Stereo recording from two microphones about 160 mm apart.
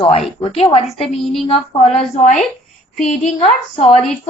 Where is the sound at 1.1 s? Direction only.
Centre (ahead or behind).